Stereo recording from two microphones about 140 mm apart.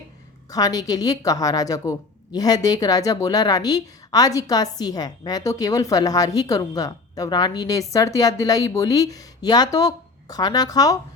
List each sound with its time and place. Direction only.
0.5 s a woman's voice: 25° left (ahead or behind)